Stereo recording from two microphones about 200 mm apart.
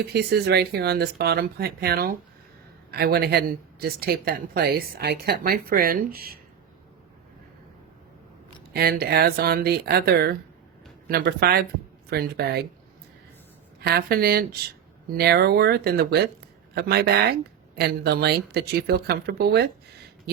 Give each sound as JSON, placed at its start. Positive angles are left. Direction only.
{"t": 0.0, "sound": "speech", "side_deg": -55}
{"t": 8.7, "sound": "speech", "side_deg": -50}
{"t": 13.8, "sound": "speech", "side_deg": -50}